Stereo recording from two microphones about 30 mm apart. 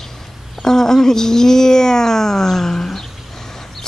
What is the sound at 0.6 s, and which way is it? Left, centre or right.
Speech, centre.